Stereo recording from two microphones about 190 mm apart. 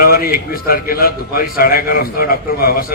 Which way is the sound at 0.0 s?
50° left (ahead or behind).